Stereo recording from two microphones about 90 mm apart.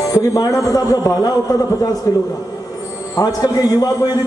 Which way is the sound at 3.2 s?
45° left (ahead or behind).